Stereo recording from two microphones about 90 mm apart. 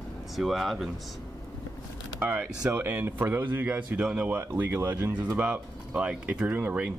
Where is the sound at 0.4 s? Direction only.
Centre (ahead or behind).